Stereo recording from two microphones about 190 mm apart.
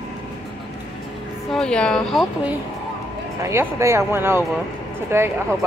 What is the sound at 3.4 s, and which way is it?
Speech, 15° right (ahead or behind).